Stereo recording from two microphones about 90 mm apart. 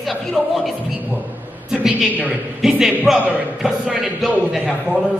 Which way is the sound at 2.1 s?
20° right (ahead or behind).